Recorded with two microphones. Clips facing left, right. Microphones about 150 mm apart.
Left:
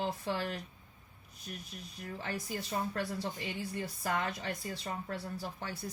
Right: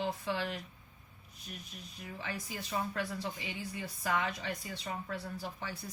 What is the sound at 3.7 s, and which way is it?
Speech, 45° left (ahead or behind).